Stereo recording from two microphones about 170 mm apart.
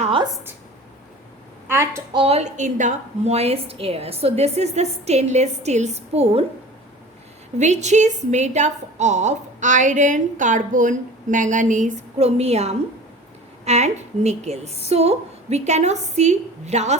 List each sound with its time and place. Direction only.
0.0 s a sound: 30° right (ahead or behind)
1.6 s a woman's voice: 15° right (ahead or behind)
2.1 s a woman's voice: 35° right (ahead or behind)
7.6 s a woman's voice: 45° right (ahead or behind)